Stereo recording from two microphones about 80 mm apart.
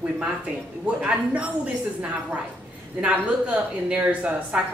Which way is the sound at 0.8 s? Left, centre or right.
Centre.